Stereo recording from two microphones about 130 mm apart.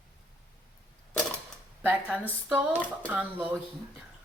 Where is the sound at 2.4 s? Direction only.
15° right (ahead or behind).